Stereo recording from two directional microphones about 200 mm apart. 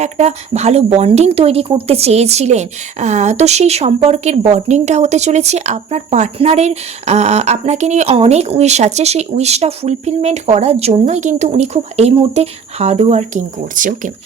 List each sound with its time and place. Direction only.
0.0 s speech: 35° right (ahead or behind)